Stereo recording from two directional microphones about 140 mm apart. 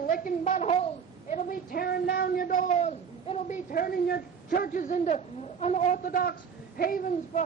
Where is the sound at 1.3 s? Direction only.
75° left (ahead or behind); by 3.6 s 55° left (ahead or behind).